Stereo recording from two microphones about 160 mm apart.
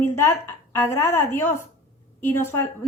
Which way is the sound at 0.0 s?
15° left (ahead or behind).